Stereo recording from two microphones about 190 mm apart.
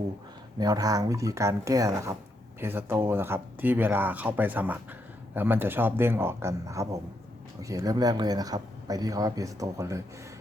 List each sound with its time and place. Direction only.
0.6 s speech: 20° right (ahead or behind)